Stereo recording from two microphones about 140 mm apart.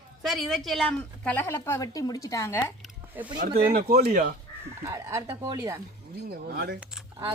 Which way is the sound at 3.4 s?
90° right.